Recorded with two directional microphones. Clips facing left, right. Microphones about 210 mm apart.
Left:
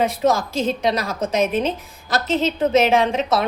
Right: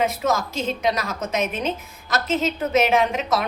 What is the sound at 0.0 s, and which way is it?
A woman's voice, 30° left (ahead or behind).